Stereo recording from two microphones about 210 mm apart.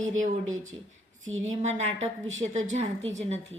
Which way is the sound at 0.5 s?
35° right (ahead or behind).